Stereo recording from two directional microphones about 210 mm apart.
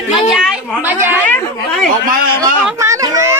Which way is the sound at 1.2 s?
5° left (ahead or behind).